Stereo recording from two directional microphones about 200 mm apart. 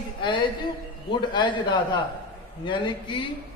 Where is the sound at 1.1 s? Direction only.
20° left (ahead or behind).